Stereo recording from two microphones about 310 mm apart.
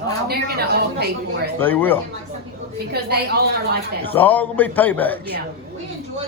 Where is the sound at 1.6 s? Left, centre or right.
Centre.